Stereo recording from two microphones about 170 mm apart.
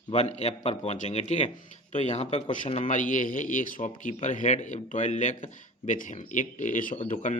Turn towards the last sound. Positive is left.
turn(degrees=50)  # may be behind; listen again after turning